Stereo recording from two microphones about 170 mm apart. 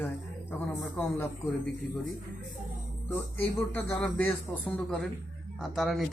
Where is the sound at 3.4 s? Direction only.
10° left (ahead or behind).